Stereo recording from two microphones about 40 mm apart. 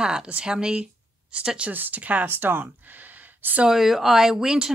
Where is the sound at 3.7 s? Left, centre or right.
Centre.